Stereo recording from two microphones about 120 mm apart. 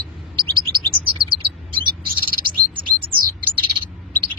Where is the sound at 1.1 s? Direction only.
45° right (ahead or behind).